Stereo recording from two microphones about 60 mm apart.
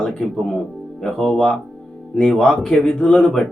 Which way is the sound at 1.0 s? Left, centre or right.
Centre.